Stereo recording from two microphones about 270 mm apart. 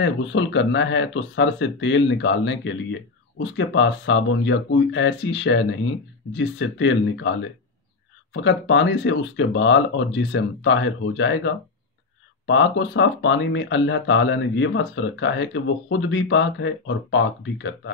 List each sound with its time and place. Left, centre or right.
0.0 s speech: left